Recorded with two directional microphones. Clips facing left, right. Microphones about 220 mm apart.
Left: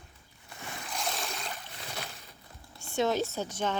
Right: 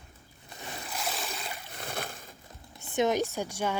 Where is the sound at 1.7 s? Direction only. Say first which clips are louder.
Right 4 dB; 55° right (ahead or behind).